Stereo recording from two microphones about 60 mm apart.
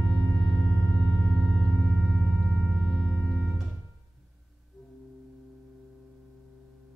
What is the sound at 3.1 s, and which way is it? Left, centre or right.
Music, left.